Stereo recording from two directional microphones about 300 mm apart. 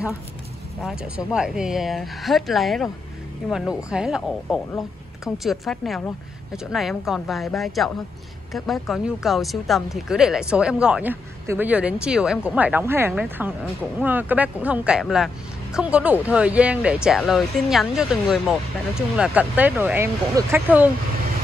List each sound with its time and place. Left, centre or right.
0.8 s speech: centre